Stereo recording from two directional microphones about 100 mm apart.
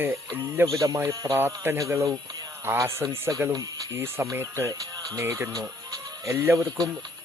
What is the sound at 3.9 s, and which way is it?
Speech, 25° right (ahead or behind).